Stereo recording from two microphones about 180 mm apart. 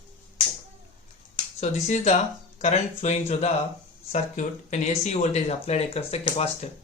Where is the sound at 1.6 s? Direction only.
40° left (ahead or behind).